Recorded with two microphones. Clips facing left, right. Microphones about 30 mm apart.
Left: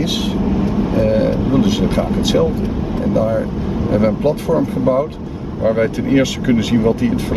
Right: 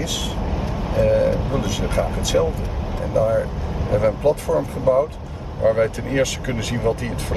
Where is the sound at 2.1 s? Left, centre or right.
Left.